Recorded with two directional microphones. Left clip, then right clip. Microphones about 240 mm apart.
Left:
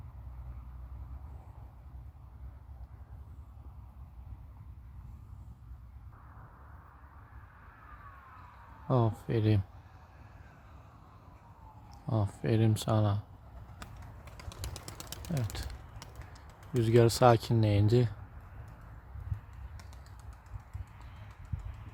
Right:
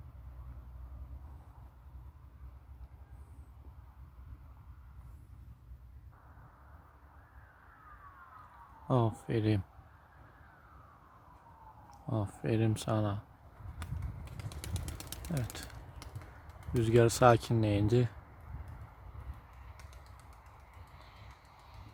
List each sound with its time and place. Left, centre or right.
8.9 s speech: centre
12.0 s speech: centre
14.3 s a sound: centre
16.7 s speech: centre
20.9 s pigeon: right